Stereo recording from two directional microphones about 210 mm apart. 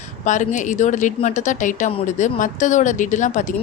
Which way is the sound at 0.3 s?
35° left (ahead or behind).